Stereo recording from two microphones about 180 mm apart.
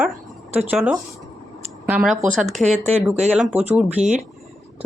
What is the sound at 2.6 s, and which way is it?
Speech, 40° right (ahead or behind).